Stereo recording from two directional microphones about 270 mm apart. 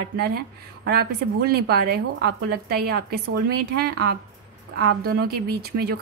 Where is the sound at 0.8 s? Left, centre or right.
Right.